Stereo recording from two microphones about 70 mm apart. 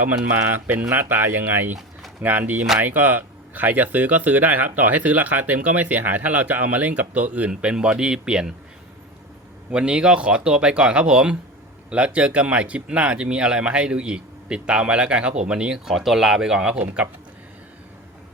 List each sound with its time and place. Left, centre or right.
0.7 s speech: right; by 8.5 s centre
9.7 s speech: centre